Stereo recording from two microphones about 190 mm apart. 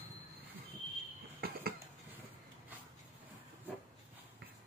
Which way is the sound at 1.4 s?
55° right (ahead or behind).